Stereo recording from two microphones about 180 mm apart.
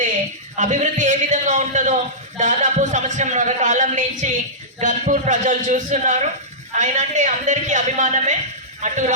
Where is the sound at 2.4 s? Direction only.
45° right (ahead or behind).